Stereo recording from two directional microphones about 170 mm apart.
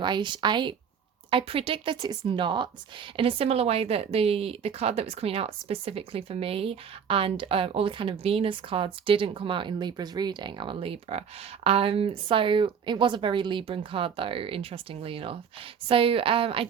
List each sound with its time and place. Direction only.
0.0 s speech: 25° right (ahead or behind)